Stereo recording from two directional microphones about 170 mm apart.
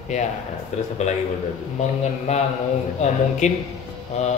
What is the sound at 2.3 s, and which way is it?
A man's voice, 40° left (ahead or behind).